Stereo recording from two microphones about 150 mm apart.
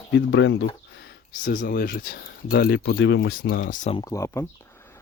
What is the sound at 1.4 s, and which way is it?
Speech, 65° left (ahead or behind).